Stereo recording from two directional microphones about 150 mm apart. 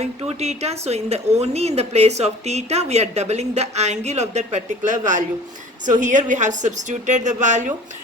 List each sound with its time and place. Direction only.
0.0 s a woman's voice: 45° right (ahead or behind)